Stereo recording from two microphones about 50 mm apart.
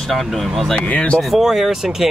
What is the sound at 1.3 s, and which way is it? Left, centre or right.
Speech, centre.